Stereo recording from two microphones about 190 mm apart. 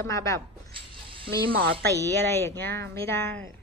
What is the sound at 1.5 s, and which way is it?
Speech, 55° right (ahead or behind).